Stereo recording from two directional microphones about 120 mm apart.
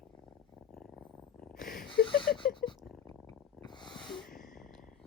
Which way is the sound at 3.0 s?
35° left (ahead or behind).